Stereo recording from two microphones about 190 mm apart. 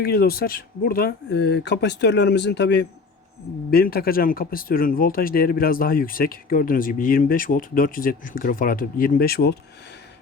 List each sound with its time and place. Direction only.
0.0 s speech: 55° left (ahead or behind)
3.7 s speech: 50° left (ahead or behind)